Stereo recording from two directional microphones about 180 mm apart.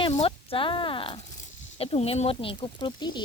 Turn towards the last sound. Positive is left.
turn(degrees=25)  # may be behind; listen again after turning